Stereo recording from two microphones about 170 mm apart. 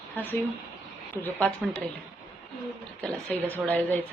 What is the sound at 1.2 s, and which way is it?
Speech, 10° left (ahead or behind).